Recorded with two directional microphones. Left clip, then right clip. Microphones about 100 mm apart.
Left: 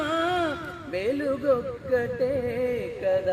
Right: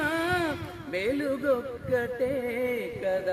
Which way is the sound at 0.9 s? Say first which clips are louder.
Left 2 dB; 45° left (ahead or behind).